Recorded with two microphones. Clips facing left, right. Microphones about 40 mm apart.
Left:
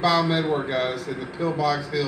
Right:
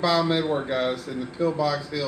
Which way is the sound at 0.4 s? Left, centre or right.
Left.